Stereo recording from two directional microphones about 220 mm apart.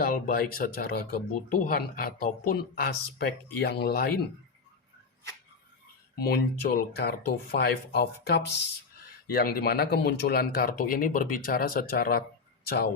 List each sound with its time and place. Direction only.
0.0 s speech: 40° left (ahead or behind)
6.1 s speech: 45° left (ahead or behind)